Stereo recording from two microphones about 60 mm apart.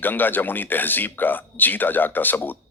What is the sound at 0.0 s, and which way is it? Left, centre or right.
A man's voice, left.